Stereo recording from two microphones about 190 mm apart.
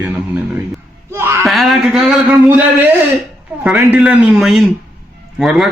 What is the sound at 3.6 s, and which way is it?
A man's voice, 5° right (ahead or behind).